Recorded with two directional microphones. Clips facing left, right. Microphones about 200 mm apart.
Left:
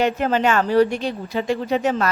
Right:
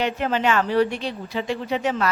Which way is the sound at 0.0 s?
45° left (ahead or behind).